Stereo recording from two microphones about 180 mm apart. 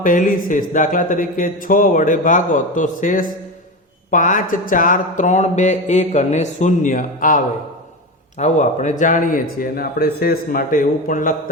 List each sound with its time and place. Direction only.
0.0 s mantra: 50° left (ahead or behind)